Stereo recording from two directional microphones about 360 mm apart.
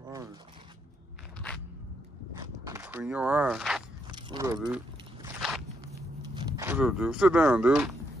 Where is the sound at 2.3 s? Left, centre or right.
Centre.